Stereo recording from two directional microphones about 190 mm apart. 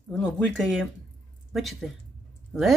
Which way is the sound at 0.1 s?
5° left (ahead or behind).